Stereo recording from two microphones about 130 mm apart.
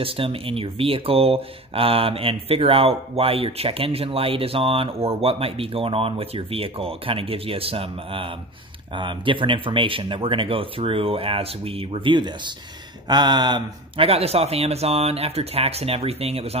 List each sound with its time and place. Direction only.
0.0 s speech: 45° right (ahead or behind)
14.0 s speech: 50° right (ahead or behind)